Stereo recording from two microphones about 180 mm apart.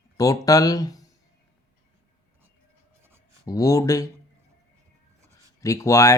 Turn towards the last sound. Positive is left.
turn(degrees=15)  # may be behind; listen again after turning